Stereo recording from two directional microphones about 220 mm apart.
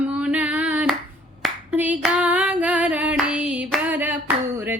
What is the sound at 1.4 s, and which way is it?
Singing, 5° right (ahead or behind).